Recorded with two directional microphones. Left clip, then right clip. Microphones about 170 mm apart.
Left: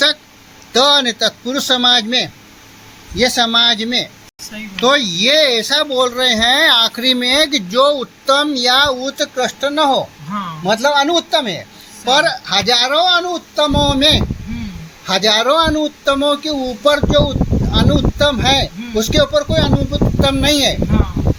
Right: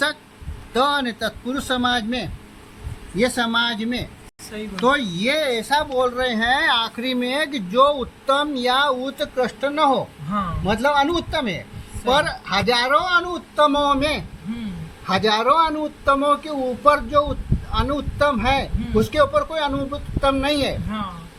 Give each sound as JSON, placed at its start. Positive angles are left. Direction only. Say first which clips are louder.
{"t": 0.7, "sound": "speech", "louder": "left 8 dB", "side_deg": 45}